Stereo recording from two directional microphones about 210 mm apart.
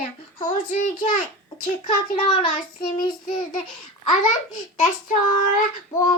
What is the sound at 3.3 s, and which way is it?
Speech, 25° left (ahead or behind).